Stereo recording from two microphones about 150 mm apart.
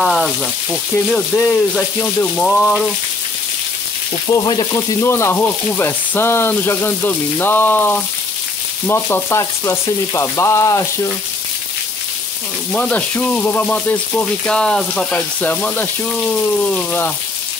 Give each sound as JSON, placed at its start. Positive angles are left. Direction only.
{"t": 0.0, "sound": "speech", "side_deg": 0}
{"t": 4.3, "sound": "frying", "side_deg": 30}
{"t": 5.0, "sound": "frying", "side_deg": 15}
{"t": 12.7, "sound": "frying", "side_deg": 10}